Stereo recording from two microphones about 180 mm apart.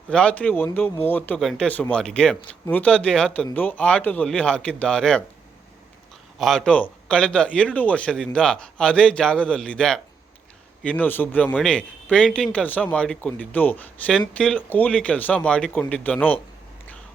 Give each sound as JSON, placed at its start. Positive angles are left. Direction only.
{"t": 0.1, "sound": "a man's voice", "side_deg": 5}
{"t": 6.4, "sound": "a man's voice", "side_deg": 0}